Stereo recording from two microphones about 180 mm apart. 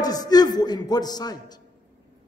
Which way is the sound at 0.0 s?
20° left (ahead or behind).